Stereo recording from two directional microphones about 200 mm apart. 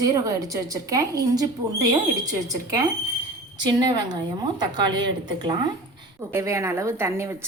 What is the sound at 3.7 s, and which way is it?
A woman's voice, 20° right (ahead or behind).